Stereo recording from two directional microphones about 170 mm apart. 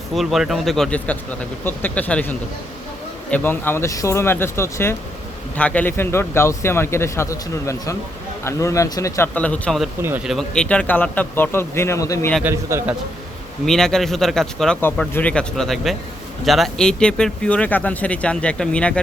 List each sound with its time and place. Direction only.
0.1 s speech: centre (ahead or behind); by 12.3 s 20° left (ahead or behind)
12.4 s a man's voice: 15° right (ahead or behind)
13.7 s speech: 5° left (ahead or behind)